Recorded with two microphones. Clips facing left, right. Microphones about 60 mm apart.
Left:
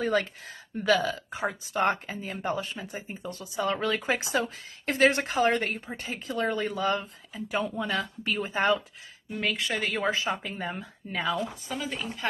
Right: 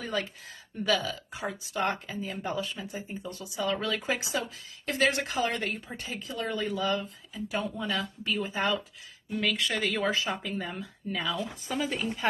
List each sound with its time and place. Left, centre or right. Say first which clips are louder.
0.0 s speech: left 6 dB; left
9.3 s speech: even; left
11.6 s a woman's voice: right 3 dB; centre